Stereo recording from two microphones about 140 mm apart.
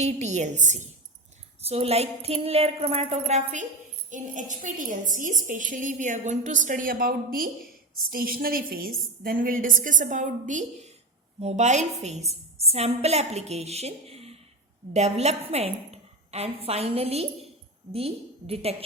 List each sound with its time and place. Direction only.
0.0 s a woman's voice: 55° right (ahead or behind)
1.6 s a woman's voice: 45° right (ahead or behind)